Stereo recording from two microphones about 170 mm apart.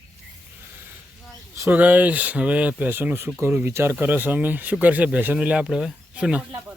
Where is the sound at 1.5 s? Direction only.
15° right (ahead or behind).